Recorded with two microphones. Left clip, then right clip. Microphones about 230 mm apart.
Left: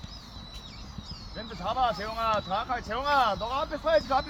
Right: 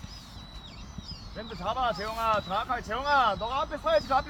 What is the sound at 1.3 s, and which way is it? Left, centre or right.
Speech, right.